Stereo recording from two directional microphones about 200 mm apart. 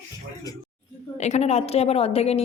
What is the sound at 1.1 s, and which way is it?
A woman's voice, 35° left (ahead or behind).